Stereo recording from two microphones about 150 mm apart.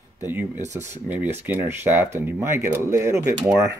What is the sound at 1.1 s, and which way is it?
Speech, 10° right (ahead or behind).